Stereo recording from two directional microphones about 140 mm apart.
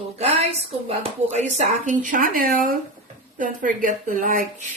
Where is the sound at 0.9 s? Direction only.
50° right (ahead or behind); by 2.7 s 90° right.